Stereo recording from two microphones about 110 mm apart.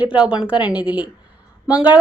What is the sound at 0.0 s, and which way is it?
Speech, 10° right (ahead or behind).